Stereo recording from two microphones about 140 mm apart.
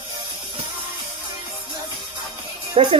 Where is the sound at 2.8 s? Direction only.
40° right (ahead or behind).